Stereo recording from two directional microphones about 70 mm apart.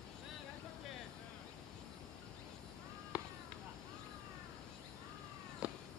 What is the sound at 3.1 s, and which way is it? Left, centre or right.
Chop, right.